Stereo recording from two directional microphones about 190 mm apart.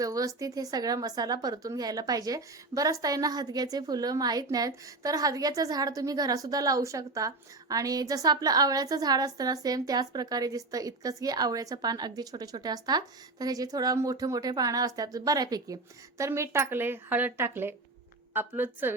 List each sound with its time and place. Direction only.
0.0 s a woman's voice: 20° right (ahead or behind)